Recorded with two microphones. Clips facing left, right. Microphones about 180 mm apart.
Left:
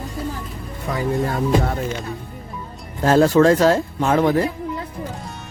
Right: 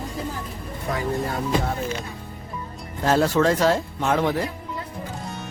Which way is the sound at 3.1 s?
45° left (ahead or behind).